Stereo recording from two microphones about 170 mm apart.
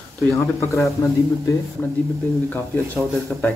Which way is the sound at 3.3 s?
5° left (ahead or behind).